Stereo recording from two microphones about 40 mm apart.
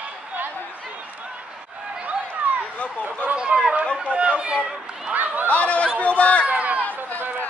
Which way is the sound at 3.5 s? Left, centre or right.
Right.